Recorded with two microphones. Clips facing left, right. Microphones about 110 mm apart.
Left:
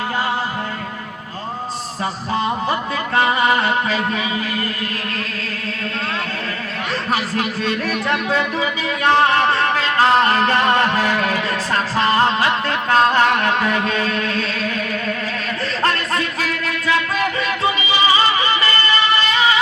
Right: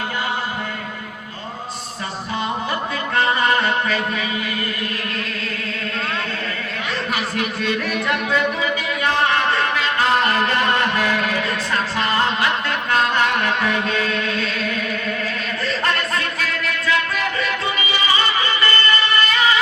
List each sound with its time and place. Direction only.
3.2 s music: 25° left (ahead or behind)
7.1 s speech: 35° left (ahead or behind)
9.0 s music: 35° left (ahead or behind)